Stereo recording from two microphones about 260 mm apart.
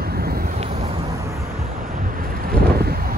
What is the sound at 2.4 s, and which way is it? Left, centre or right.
Vehicle, right.